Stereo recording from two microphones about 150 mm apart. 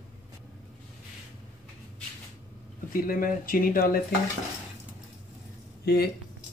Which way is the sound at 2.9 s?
70° left (ahead or behind).